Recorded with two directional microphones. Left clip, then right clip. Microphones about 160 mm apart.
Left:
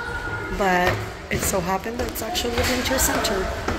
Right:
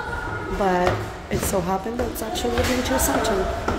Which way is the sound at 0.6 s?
15° right (ahead or behind).